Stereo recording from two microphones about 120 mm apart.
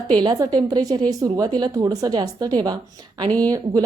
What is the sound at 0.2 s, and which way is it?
A woman's voice, 35° right (ahead or behind).